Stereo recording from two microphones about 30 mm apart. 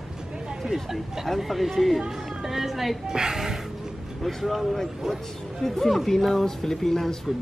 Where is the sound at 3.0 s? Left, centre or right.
Right.